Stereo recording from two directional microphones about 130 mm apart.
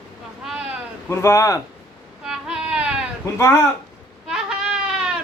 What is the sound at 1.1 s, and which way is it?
Speech, 20° left (ahead or behind).